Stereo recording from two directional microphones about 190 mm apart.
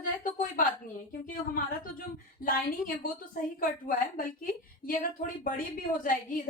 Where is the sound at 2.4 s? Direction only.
45° left (ahead or behind).